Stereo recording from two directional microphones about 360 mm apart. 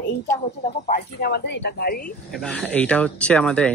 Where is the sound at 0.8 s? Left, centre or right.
Left.